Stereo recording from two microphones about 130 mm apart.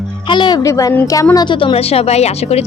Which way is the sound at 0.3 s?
35° left (ahead or behind).